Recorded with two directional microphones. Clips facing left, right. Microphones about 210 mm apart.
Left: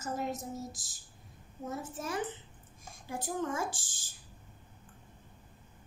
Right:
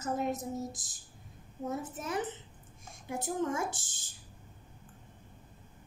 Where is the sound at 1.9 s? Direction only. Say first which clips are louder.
Right 1 dB; 20° right (ahead or behind).